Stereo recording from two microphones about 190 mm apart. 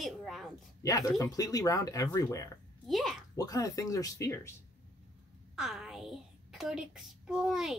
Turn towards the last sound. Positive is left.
turn(degrees=0)  # may be behind; listen again after turning